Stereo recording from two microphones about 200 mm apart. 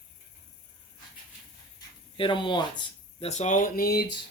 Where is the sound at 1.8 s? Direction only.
25° left (ahead or behind); by 4.1 s 50° left (ahead or behind).